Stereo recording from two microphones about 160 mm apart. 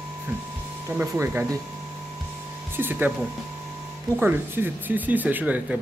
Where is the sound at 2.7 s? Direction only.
10° right (ahead or behind).